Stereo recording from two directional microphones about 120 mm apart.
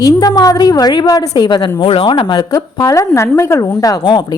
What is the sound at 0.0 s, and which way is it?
A woman's voice, 35° left (ahead or behind).